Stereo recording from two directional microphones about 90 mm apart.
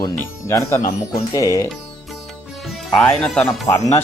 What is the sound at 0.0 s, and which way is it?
Speech, 40° left (ahead or behind).